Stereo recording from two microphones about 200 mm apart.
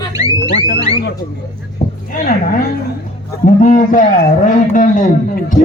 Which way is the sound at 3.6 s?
40° left (ahead or behind).